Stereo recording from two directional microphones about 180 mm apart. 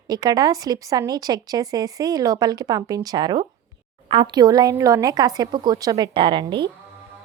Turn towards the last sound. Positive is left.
turn(degrees=-25)  # may be behind; listen again after turning